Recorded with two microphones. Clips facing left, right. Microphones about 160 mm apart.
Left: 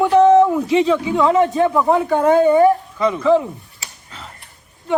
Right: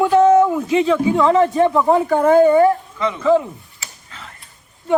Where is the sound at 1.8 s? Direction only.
Centre (ahead or behind).